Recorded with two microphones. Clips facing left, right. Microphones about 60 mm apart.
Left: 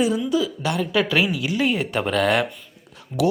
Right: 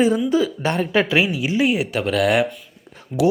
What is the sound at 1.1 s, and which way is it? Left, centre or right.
Speech, centre.